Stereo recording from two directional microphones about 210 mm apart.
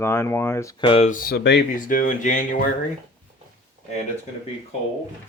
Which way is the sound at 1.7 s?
40° left (ahead or behind).